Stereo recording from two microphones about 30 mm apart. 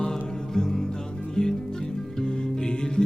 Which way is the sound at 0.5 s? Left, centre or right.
Centre.